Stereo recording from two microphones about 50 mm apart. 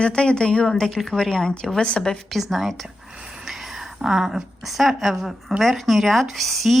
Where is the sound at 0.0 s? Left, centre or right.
Centre.